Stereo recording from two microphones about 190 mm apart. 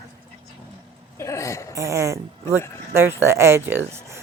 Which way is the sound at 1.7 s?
15° right (ahead or behind).